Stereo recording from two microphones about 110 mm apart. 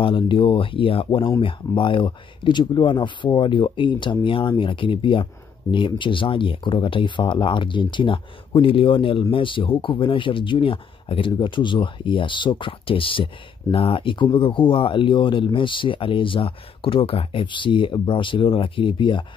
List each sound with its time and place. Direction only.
0.0 s speech: 50° left (ahead or behind)